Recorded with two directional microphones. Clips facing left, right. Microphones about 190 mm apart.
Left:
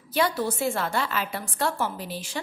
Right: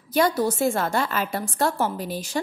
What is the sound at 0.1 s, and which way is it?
A woman's voice, 45° right (ahead or behind).